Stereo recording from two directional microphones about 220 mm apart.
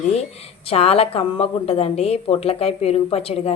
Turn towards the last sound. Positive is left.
turn(degrees=25)  # may be behind; listen again after turning